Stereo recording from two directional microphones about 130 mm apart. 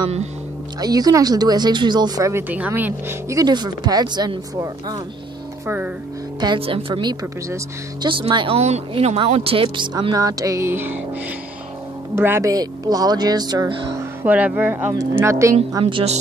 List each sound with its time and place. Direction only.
0.7 s speech: 30° right (ahead or behind)
6.4 s speech: 40° right (ahead or behind)
7.4 s speech: 25° right (ahead or behind)
8.1 s speech: 40° right (ahead or behind)
8.5 s speech: 55° right (ahead or behind); by 11.0 s 15° right (ahead or behind)
12.2 s speech: 20° right (ahead or behind)
14.2 s speech: 10° right (ahead or behind)
15.8 s speech: 50° right (ahead or behind)